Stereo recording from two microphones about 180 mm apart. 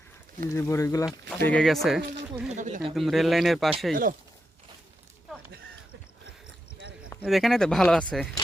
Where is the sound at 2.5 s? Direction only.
40° right (ahead or behind).